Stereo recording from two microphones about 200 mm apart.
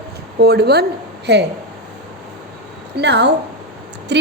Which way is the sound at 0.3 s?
55° right (ahead or behind).